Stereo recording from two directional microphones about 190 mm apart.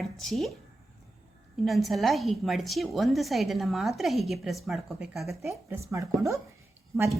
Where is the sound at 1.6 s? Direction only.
Centre (ahead or behind).